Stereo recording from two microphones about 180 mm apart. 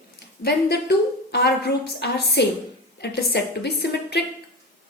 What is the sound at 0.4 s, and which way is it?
A woman's voice, 65° left (ahead or behind).